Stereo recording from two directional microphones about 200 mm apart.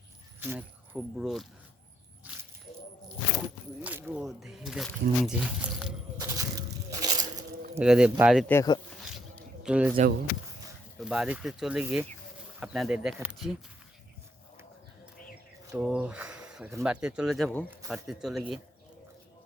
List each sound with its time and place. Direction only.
0.3 s speech: 10° right (ahead or behind)
2.3 s a sound: 10° right (ahead or behind)
3.8 s speech: 5° right (ahead or behind)
6.1 s crushing: 15° right (ahead or behind)
7.8 s speech: 5° right (ahead or behind)
8.4 s speech: 15° left (ahead or behind)
9.6 s speech: 5° right (ahead or behind)
11.0 s speech: 5° right (ahead or behind)
15.7 s speech: 5° right (ahead or behind)